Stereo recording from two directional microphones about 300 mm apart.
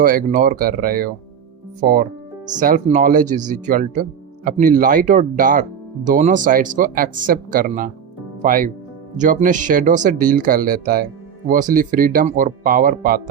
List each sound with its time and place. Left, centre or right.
0.0 s speech: right